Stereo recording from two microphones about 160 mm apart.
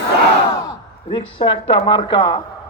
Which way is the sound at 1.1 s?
30° left (ahead or behind).